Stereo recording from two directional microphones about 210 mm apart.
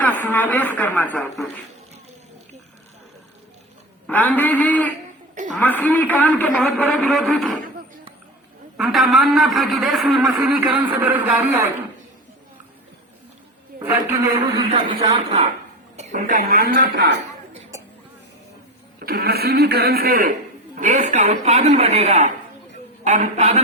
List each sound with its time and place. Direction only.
0.0 s a man's voice: 10° left (ahead or behind)
4.0 s a man's voice: 10° left (ahead or behind)
8.8 s a man's voice: centre (ahead or behind)
13.7 s a man's voice: 15° right (ahead or behind)
14.8 s a woman's voice: 30° right (ahead or behind); by 17.2 s 50° right (ahead or behind)
18.9 s a woman's voice: 45° right (ahead or behind)